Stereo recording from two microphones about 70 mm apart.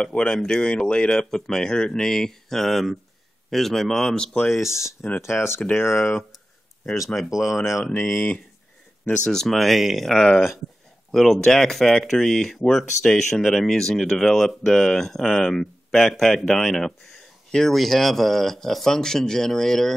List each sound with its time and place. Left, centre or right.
0.0 s speech: centre
5.2 s speech: left
7.2 s speech: centre
8.1 s speech: centre